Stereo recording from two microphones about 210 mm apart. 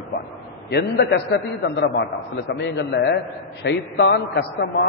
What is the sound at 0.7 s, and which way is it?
A man's voice, 50° left (ahead or behind).